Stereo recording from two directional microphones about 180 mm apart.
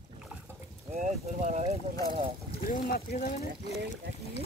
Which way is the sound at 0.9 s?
45° right (ahead or behind).